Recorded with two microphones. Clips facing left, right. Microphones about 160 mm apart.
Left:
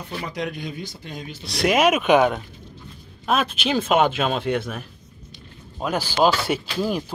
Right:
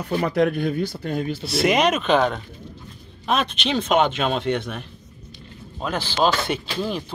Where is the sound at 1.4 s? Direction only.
Centre (ahead or behind).